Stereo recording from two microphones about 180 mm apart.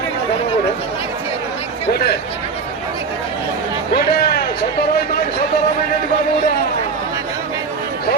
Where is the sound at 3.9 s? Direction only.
60° left (ahead or behind).